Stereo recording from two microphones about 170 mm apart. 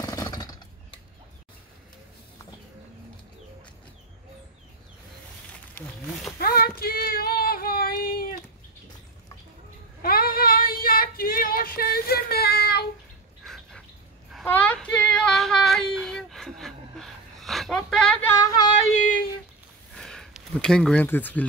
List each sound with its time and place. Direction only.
0.0 s a sound: 20° left (ahead or behind)
6.4 s female singing: 65° left (ahead or behind)
10.0 s female singing: 60° left (ahead or behind)
13.5 s bird: 5° left (ahead or behind)
14.3 s child singing: 5° left (ahead or behind)
18.4 s yodeling: 25° left (ahead or behind)
20.0 s a sound: centre (ahead or behind)